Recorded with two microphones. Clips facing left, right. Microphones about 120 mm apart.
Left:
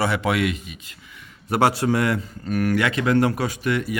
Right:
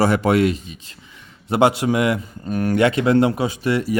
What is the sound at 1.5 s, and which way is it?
A man's voice, 20° right (ahead or behind).